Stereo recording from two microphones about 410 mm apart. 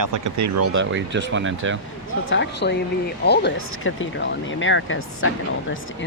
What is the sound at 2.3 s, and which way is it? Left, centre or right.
Speech, left.